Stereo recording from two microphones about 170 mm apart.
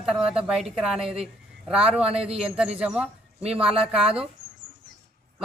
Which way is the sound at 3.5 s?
35° right (ahead or behind).